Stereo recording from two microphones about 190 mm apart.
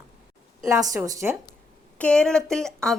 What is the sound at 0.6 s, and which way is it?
Speech, 15° right (ahead or behind).